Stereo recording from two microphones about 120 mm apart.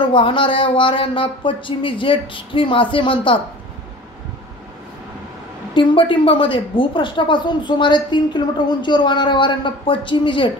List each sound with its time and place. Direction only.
0.1 s a woman's voice: 45° left (ahead or behind)
5.8 s a woman's voice: 45° left (ahead or behind)